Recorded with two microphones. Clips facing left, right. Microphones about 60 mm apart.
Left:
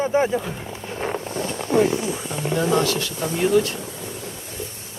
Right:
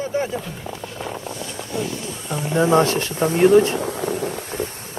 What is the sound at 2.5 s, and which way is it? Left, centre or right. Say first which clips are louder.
Speech: right 4 dB; right.